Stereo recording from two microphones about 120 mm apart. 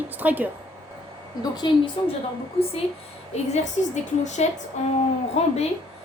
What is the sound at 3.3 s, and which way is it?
A woman's voice, 70° left (ahead or behind).